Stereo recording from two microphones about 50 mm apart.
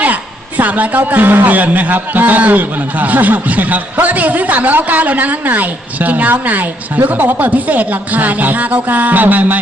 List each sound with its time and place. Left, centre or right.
0.0 s a woman's voice: right